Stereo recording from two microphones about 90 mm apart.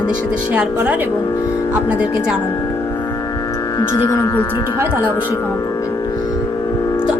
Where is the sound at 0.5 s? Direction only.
15° right (ahead or behind).